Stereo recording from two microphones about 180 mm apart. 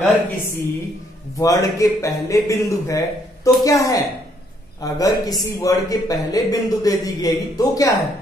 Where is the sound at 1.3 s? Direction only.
20° left (ahead or behind).